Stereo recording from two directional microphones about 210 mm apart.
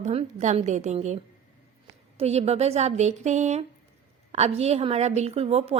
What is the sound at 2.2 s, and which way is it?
A woman's voice, 30° right (ahead or behind).